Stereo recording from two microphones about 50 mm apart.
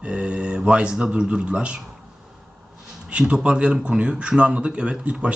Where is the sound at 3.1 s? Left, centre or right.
Right.